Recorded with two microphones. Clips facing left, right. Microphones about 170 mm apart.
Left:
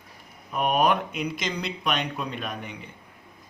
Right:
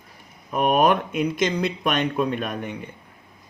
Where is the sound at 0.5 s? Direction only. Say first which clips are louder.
Right 4 dB; 45° right (ahead or behind).